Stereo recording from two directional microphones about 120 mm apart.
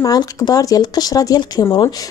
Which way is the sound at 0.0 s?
30° left (ahead or behind).